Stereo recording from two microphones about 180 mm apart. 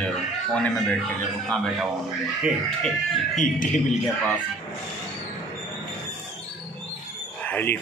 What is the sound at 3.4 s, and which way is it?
Speech, 45° left (ahead or behind).